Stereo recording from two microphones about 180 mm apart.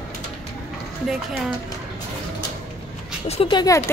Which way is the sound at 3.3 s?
30° left (ahead or behind).